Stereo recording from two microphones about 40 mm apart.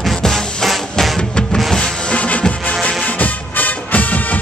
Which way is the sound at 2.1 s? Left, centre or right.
Left.